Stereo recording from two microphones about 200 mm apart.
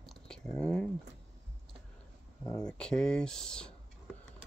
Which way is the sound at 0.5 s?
5° left (ahead or behind).